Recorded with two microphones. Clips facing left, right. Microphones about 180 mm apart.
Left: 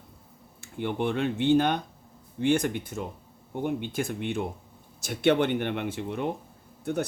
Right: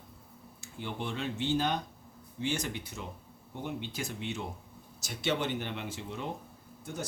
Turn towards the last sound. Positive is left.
turn(degrees=60)  # may be behind; listen again after turning